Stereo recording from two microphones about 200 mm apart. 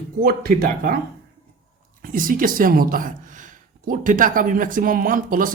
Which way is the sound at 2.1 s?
45° right (ahead or behind).